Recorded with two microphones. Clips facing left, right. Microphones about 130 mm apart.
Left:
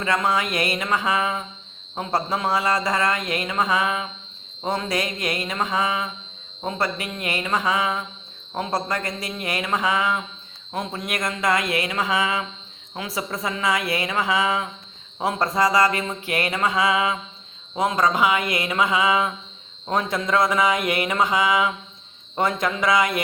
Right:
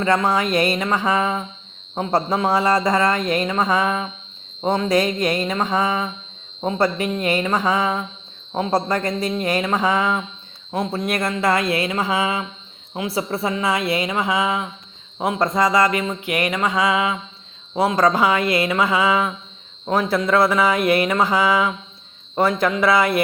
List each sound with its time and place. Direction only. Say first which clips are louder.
0.0 s speech: right 4 dB; 30° right (ahead or behind)
15.7 s music: right 2 dB; 25° left (ahead or behind)
16.7 s a man's voice: right 1 dB; 25° right (ahead or behind)
18.1 s a woman's voice: right 3 dB; 15° left (ahead or behind)
18.8 s a man's voice: left 2 dB; 30° right (ahead or behind)
20.5 s music: right 4 dB; 20° left (ahead or behind)
21.2 s a man's voice: right 3 dB; 35° right (ahead or behind)
22.5 s speech: right 5 dB; 30° right (ahead or behind)